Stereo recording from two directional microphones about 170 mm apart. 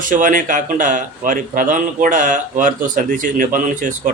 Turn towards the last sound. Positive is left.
turn(degrees=-50)  # may be behind; listen again after turning